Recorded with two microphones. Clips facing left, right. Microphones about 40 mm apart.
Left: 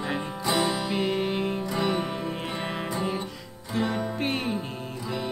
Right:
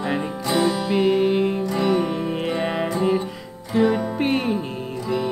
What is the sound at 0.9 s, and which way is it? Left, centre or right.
Music, centre.